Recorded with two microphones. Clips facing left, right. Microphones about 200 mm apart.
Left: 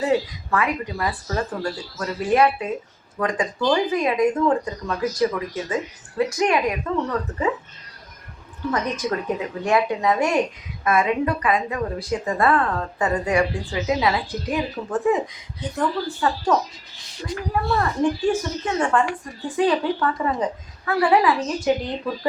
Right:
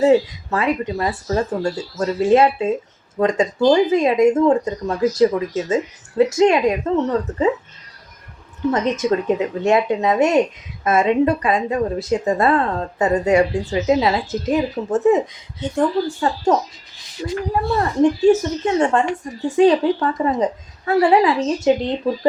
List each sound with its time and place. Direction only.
0.5 s speech: 25° right (ahead or behind)
8.7 s speech: 25° right (ahead or behind)